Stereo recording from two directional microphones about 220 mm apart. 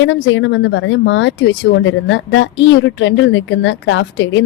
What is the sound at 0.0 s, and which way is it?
Speech, 60° left (ahead or behind).